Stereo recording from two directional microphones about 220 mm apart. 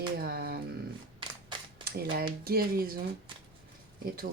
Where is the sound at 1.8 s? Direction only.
45° right (ahead or behind).